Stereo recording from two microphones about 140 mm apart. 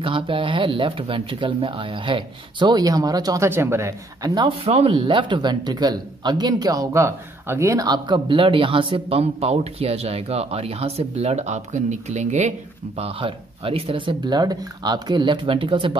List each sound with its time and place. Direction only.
0.0 s a man's voice: 40° right (ahead or behind)
4.5 s a man's voice: 45° right (ahead or behind)